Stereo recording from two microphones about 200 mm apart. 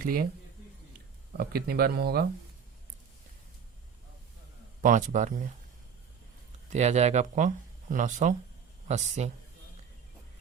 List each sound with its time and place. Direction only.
0.0 s speech: 45° right (ahead or behind)
1.4 s speech: 50° right (ahead or behind)
4.8 s speech: 40° right (ahead or behind)
6.7 s speech: 35° right (ahead or behind)